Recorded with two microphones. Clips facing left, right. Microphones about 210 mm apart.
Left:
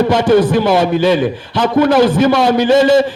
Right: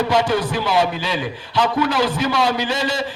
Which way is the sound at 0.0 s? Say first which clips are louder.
Left 8 dB; 50° left (ahead or behind).